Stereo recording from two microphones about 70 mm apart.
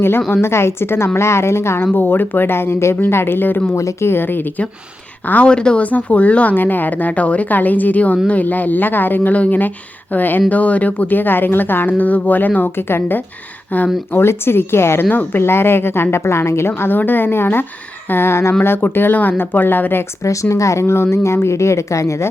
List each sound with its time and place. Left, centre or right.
0.4 s a woman's voice: left
3.8 s speech: left
4.1 s a woman's voice: left
5.3 s speech: centre
14.2 s a woman's voice: left
20.2 s speech: left